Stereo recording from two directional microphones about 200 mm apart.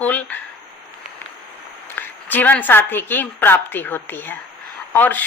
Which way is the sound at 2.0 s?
10° left (ahead or behind).